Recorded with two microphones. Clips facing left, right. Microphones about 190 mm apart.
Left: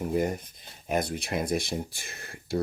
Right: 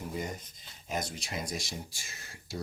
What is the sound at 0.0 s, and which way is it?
Speech, 60° left (ahead or behind).